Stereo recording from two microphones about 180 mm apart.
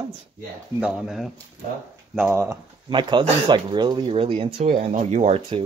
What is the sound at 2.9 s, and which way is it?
Speech, 25° right (ahead or behind).